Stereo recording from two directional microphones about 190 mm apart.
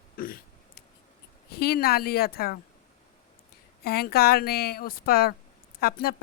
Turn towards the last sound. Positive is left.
turn(degrees=50)  # may be behind; listen again after turning